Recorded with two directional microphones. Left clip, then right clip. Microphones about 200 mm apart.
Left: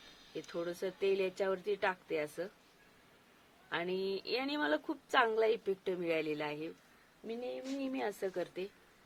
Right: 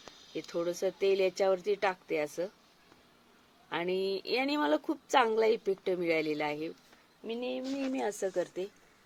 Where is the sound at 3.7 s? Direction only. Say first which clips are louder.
Right 4 dB; 40° right (ahead or behind).